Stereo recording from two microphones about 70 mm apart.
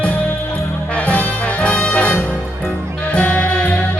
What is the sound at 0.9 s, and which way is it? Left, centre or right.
Music, left.